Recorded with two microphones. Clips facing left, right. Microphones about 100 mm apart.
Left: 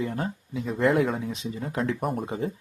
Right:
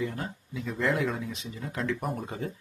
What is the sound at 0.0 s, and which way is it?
Speech, 40° left (ahead or behind).